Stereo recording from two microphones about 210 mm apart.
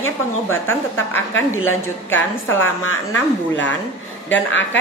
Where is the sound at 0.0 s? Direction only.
75° left (ahead or behind).